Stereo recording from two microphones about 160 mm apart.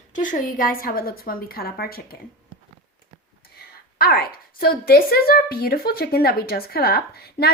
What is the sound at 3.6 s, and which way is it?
A woman's voice, 70° left (ahead or behind).